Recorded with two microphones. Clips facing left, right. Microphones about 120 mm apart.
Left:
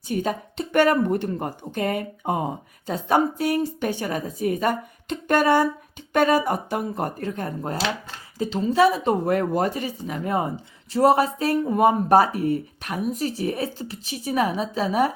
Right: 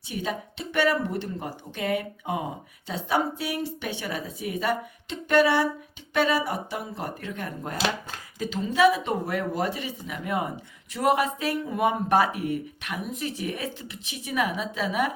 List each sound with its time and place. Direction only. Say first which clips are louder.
0.1 s a woman's voice: left 6 dB; 45° left (ahead or behind)